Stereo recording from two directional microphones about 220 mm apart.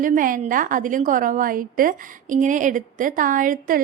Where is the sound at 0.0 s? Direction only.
35° right (ahead or behind).